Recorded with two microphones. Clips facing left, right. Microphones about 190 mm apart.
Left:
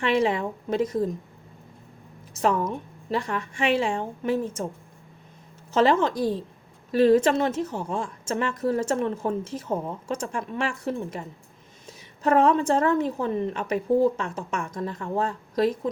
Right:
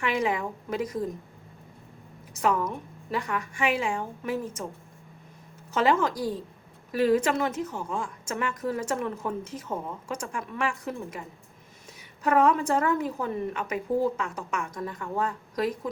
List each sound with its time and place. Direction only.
0.0 s a woman's voice: 30° left (ahead or behind)
2.4 s a woman's voice: 30° left (ahead or behind)
5.7 s a woman's voice: 30° left (ahead or behind)
12.2 s a woman's voice: 25° left (ahead or behind)